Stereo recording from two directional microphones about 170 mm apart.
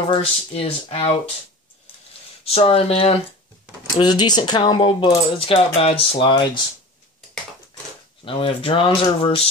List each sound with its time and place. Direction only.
0.1 s speech: 35° left (ahead or behind)
2.5 s speech: 35° left (ahead or behind)
3.9 s speech: 25° left (ahead or behind)
8.3 s speech: 30° left (ahead or behind)